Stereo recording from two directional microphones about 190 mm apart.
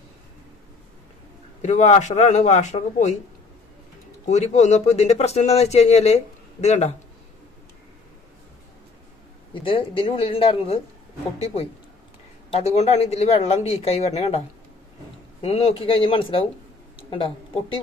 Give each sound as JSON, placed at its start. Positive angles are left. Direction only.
{"t": 1.6, "sound": "speech", "side_deg": 40}
{"t": 4.3, "sound": "speech", "side_deg": 35}
{"t": 9.5, "sound": "speech", "side_deg": 25}
{"t": 15.4, "sound": "speech", "side_deg": 30}